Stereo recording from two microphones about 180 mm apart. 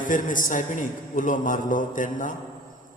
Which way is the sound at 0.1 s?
50° left (ahead or behind).